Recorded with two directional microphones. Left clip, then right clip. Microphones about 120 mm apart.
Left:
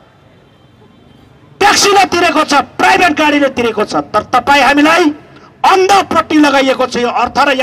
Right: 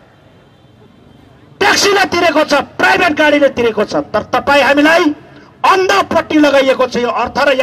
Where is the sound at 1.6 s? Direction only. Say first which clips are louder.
Left 3 dB; 20° left (ahead or behind).